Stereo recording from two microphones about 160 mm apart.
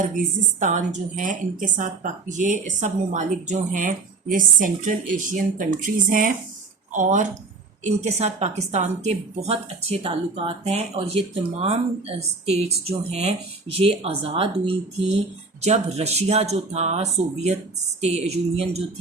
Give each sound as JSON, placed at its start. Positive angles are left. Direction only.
{"t": 0.1, "sound": "a woman's voice", "side_deg": -55}